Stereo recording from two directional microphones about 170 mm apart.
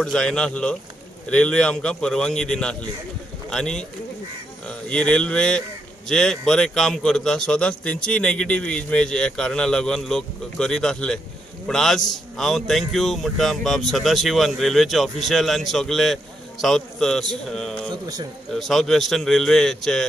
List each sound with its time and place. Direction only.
0.0 s a man's voice: 5° left (ahead or behind)
18.0 s a man's voice: 25° right (ahead or behind)
18.5 s a man's voice: centre (ahead or behind)